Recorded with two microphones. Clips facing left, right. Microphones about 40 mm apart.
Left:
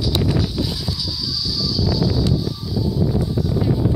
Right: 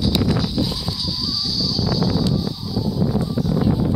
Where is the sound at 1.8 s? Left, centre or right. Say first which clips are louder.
Even; right.